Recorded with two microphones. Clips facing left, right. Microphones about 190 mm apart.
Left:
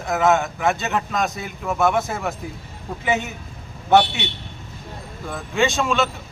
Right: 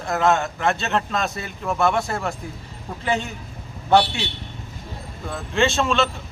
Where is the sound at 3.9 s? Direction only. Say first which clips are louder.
Left 1 dB; 5° left (ahead or behind).